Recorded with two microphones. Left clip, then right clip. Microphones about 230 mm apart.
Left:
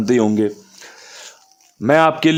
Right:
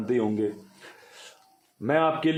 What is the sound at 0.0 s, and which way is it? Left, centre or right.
Speech, left.